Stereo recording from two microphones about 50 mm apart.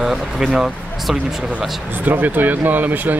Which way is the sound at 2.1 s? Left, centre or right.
Right.